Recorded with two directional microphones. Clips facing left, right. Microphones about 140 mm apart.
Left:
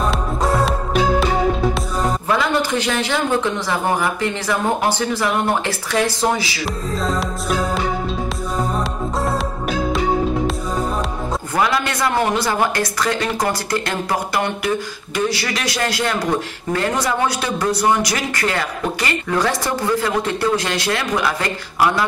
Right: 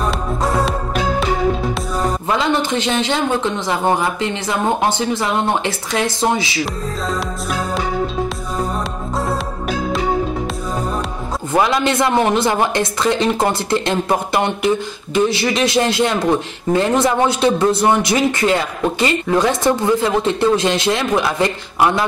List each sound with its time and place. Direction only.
0.4 s music: centre (ahead or behind)
2.2 s a man's voice: 25° right (ahead or behind)
6.6 s music: centre (ahead or behind)
9.2 s music: centre (ahead or behind)
11.5 s a man's voice: 25° right (ahead or behind)